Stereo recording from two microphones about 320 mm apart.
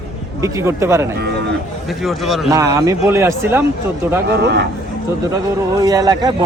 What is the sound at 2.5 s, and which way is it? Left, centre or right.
Speech, centre.